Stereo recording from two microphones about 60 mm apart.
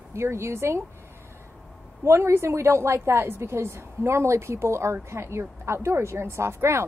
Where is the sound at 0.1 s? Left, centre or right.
Right.